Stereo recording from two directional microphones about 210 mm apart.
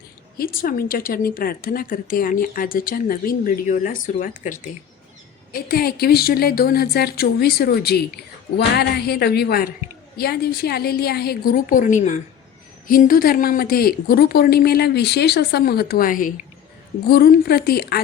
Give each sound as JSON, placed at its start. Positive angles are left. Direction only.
{"t": 0.3, "sound": "a woman's voice", "side_deg": 45}